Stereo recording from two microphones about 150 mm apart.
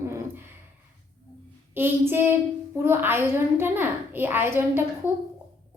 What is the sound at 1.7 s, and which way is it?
A woman's voice, 15° right (ahead or behind).